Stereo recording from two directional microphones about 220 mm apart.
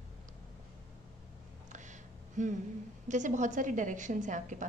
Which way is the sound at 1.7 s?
35° right (ahead or behind).